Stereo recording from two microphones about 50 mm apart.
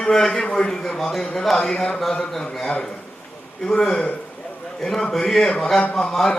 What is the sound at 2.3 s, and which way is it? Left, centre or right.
A man's voice, centre.